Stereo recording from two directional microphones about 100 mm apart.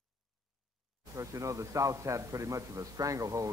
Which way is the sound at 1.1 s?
35° right (ahead or behind).